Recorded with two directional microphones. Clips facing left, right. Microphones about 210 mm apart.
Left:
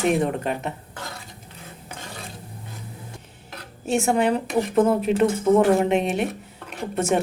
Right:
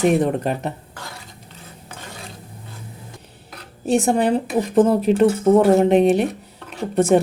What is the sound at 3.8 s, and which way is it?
Speech, 35° right (ahead or behind).